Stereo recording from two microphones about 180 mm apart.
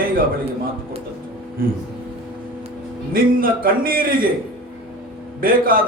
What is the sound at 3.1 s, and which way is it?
A man's voice, 50° right (ahead or behind).